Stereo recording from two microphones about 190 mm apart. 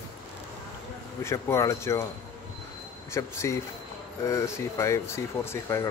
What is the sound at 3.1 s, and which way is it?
Speech, 15° left (ahead or behind).